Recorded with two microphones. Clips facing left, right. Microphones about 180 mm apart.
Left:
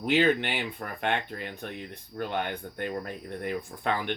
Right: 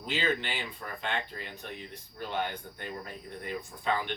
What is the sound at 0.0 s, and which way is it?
Speech, 60° left (ahead or behind).